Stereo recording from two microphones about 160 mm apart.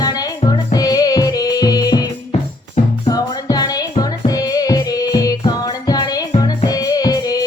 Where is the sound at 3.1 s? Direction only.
25° left (ahead or behind).